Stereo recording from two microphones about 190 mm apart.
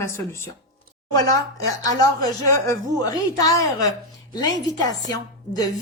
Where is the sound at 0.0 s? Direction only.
15° left (ahead or behind).